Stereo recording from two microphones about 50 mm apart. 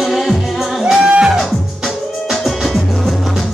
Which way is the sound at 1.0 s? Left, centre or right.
Right.